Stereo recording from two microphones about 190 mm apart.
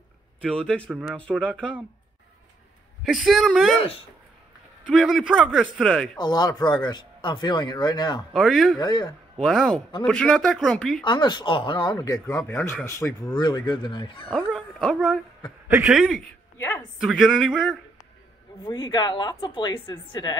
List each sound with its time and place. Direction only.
0.6 s speech: 5° left (ahead or behind)
3.0 s speech: centre (ahead or behind)
4.8 s speech: centre (ahead or behind)
6.1 s speech: 20° left (ahead or behind)
8.3 s speech: centre (ahead or behind)
8.7 s speech: 25° left (ahead or behind)
9.4 s speech: centre (ahead or behind)
11.1 s speech: 25° left (ahead or behind)
13.3 s speech: 20° left (ahead or behind)
14.3 s speech: centre (ahead or behind)
17.0 s speech: centre (ahead or behind)
18.6 s speech: 20° left (ahead or behind)